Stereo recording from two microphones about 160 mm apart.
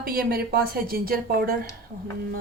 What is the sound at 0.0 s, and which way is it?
Speech, 65° right (ahead or behind).